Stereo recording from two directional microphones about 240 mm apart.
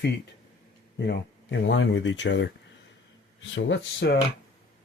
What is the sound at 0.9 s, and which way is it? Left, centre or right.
Speech, left.